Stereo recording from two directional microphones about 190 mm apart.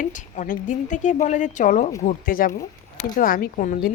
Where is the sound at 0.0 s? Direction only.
40° left (ahead or behind).